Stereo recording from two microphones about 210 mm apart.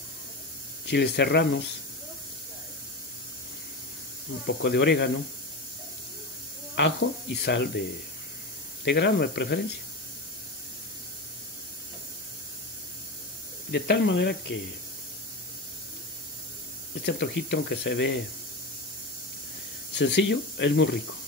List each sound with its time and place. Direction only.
0.8 s speech: 55° left (ahead or behind)
4.5 s speech: 55° left (ahead or behind)
6.7 s speech: 55° left (ahead or behind)
8.8 s speech: 55° left (ahead or behind)
13.7 s speech: 55° left (ahead or behind)
17.0 s speech: 50° left (ahead or behind)
19.9 s speech: 55° left (ahead or behind)